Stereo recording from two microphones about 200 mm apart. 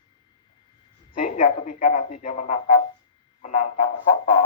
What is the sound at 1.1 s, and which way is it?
A man's voice, 45° left (ahead or behind).